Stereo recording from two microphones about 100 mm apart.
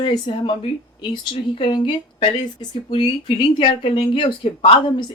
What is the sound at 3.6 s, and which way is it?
Speech, 60° left (ahead or behind).